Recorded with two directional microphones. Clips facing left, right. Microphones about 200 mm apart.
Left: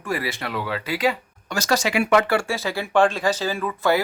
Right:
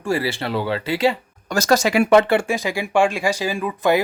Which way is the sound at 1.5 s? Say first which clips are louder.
Right 5 dB; 45° right (ahead or behind).